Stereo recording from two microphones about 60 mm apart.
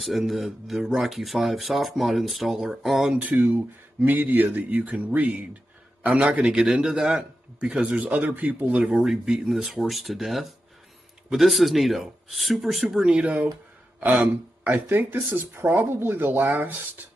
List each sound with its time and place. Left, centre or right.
0.0 s speech: centre
3.3 s speech: right
6.4 s speech: centre
7.9 s speech: right
8.8 s speech: centre
13.1 s speech: right